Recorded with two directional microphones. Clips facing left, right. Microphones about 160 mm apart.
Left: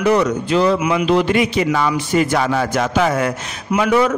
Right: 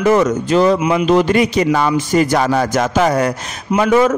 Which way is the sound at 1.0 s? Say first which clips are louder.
Right 3 dB; 45° right (ahead or behind).